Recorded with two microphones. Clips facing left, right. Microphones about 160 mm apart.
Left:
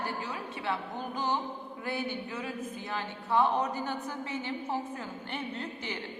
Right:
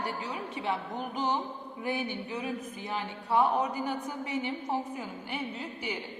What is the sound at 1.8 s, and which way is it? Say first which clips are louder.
A woman's voice: right 2 dB; 15° right (ahead or behind).